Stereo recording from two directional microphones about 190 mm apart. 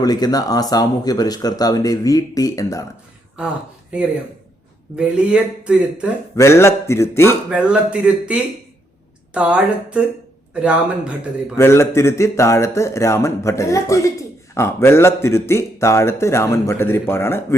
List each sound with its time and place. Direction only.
0.0 s speech: 20° left (ahead or behind)
4.9 s speech: 5° right (ahead or behind)
6.3 s speech: 15° left (ahead or behind)
7.5 s speech: 5° right (ahead or behind)
11.5 s speech: 15° left (ahead or behind)